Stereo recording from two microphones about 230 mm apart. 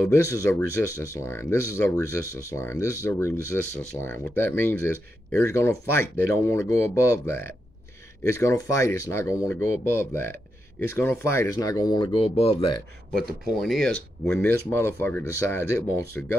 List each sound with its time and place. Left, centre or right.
0.1 s speech: centre
11.0 s speech: centre
13.1 s speech: centre